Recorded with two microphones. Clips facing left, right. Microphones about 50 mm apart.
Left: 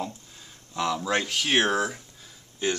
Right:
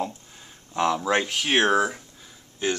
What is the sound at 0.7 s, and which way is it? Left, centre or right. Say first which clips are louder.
Speech: right 4 dB; right.